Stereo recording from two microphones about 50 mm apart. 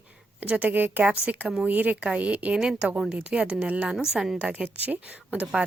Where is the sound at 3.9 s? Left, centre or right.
Centre.